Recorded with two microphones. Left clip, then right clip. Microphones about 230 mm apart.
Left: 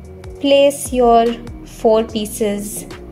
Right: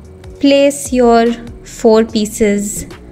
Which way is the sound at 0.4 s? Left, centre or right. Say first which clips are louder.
Right 2 dB; centre.